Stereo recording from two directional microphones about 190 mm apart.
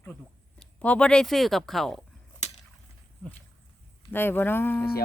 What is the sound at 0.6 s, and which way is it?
Speech, 5° left (ahead or behind).